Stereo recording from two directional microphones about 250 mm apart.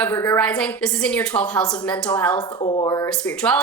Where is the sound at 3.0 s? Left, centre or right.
Centre.